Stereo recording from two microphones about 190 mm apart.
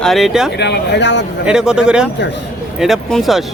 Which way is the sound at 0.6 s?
60° left (ahead or behind).